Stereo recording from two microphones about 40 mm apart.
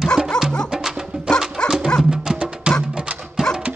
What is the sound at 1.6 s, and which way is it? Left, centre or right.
Music, left.